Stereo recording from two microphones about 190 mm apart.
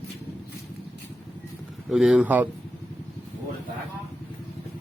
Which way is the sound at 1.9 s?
5° right (ahead or behind).